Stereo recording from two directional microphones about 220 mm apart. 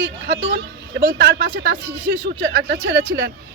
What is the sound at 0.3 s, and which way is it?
Speech, 55° right (ahead or behind).